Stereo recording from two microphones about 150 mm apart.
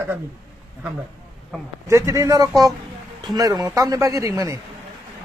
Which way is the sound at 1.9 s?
20° right (ahead or behind).